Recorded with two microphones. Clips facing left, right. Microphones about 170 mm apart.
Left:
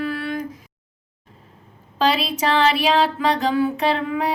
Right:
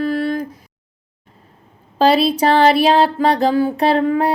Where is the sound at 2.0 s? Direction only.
35° right (ahead or behind).